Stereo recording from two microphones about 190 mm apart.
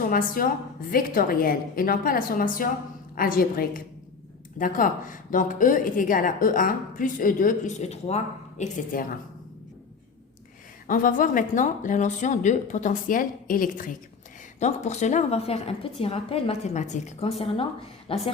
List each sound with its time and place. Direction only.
0.0 s a woman's voice: 45° left (ahead or behind)
10.8 s a woman's voice: 45° left (ahead or behind); by 18.2 s 30° left (ahead or behind)